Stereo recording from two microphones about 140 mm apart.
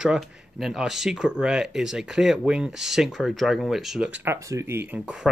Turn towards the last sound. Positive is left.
turn(degrees=-10)  # may be behind; listen again after turning